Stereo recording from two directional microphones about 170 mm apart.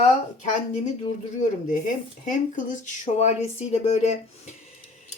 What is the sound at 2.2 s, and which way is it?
Speech, 45° left (ahead or behind).